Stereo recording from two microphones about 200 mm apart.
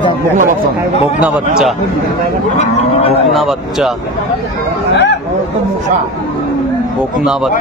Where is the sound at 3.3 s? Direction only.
Centre (ahead or behind).